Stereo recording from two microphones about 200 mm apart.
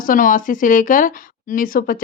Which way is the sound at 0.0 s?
45° left (ahead or behind).